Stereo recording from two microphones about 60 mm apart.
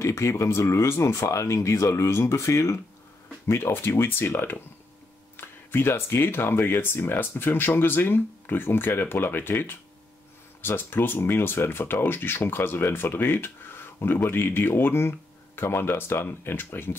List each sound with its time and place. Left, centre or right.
0.0 s speech: left
3.4 s speech: left